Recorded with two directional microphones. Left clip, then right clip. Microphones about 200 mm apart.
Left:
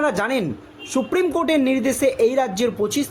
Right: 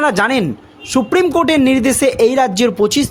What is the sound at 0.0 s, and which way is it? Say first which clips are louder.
Speech: right 7 dB; 50° right (ahead or behind).